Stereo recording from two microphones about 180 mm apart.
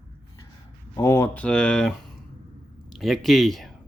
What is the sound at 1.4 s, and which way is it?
Speech, 5° left (ahead or behind).